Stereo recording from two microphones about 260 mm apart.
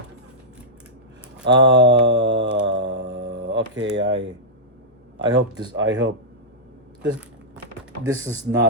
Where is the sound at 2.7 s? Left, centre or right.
Right.